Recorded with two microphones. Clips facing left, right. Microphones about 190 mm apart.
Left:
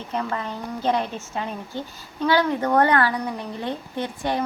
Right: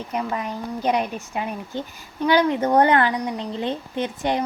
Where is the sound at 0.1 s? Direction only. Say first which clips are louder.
Even; 10° right (ahead or behind).